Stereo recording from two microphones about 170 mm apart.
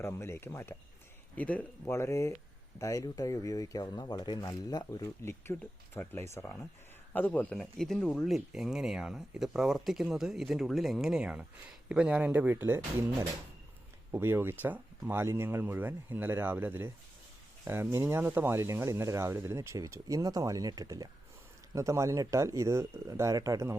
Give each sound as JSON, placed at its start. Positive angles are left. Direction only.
{"t": 0.0, "sound": "speech", "side_deg": 15}
{"t": 14.1, "sound": "speech", "side_deg": -15}